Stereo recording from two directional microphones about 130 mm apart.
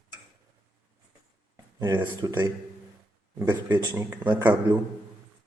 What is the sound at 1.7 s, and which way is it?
Speech, 30° right (ahead or behind).